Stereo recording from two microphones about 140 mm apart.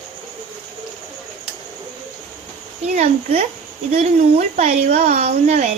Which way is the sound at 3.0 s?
50° right (ahead or behind).